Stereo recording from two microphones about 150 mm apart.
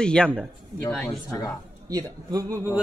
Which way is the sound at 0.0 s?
5° left (ahead or behind).